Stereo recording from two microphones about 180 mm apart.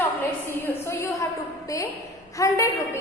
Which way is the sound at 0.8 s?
15° left (ahead or behind).